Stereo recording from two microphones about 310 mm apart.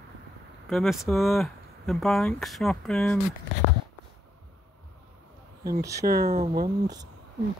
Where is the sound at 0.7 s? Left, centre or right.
Centre.